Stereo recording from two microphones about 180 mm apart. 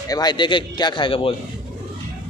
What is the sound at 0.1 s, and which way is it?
A man's voice, 25° left (ahead or behind).